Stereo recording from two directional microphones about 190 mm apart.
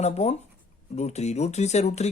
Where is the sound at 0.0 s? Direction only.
35° left (ahead or behind).